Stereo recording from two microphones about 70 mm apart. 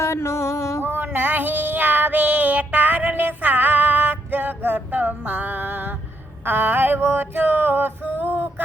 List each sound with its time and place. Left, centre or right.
0.0 s music: left
0.8 s child singing: right
6.4 s a sound: right
8.2 s music: right